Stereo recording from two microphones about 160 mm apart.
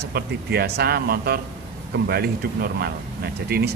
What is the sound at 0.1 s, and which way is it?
Speech, 80° right.